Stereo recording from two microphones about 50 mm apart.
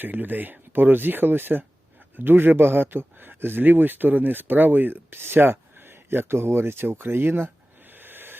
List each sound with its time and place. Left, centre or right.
0.0 s speech: right